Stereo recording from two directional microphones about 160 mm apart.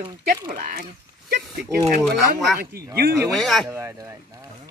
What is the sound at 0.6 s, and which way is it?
Speech, 65° right (ahead or behind).